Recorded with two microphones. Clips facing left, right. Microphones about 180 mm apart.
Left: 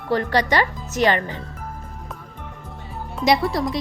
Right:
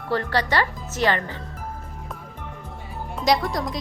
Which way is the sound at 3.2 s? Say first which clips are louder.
Left 3 dB; 5° left (ahead or behind).